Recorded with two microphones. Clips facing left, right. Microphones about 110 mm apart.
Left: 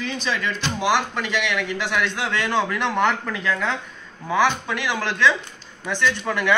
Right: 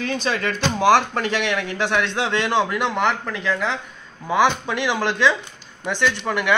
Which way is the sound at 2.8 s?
5° right (ahead or behind).